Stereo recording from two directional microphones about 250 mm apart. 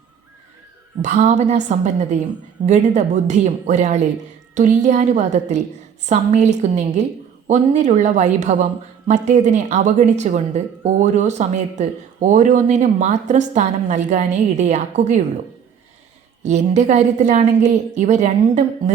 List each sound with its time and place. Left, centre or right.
1.0 s speech: right
16.4 s speech: right